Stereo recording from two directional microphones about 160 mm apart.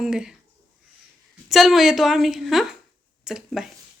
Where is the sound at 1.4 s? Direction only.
Centre (ahead or behind).